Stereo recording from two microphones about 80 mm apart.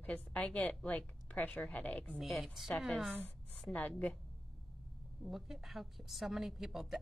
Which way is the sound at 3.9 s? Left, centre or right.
Centre.